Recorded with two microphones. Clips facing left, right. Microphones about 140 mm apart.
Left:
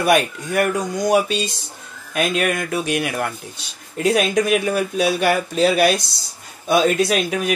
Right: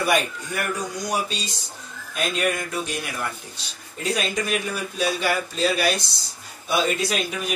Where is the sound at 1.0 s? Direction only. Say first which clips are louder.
Left 12 dB; 60° left (ahead or behind).